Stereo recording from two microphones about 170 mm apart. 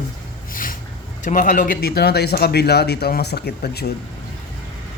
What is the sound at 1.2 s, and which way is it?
Speech, 50° left (ahead or behind).